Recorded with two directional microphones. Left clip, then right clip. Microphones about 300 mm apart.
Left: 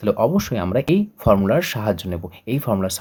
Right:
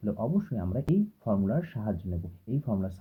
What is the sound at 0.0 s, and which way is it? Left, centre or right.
Speech, left.